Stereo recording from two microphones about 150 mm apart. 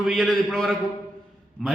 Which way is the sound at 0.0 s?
Centre (ahead or behind).